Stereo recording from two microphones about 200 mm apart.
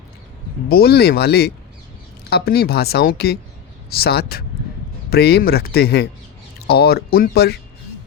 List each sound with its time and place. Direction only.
0.7 s speech: 50° left (ahead or behind)